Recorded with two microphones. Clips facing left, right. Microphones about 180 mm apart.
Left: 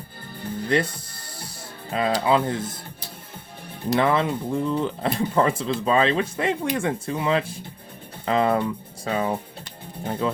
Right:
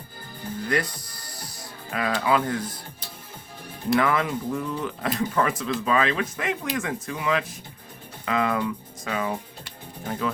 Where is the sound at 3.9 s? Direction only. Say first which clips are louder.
Left 3 dB; 25° left (ahead or behind).